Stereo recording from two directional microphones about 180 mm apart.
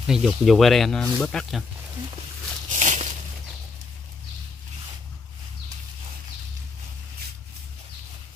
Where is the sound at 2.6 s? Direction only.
45° right (ahead or behind).